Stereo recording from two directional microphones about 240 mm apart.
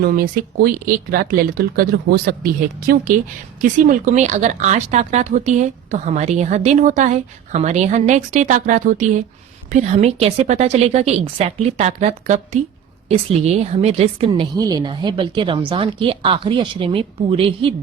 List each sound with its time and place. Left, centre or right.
0.0 s speech: right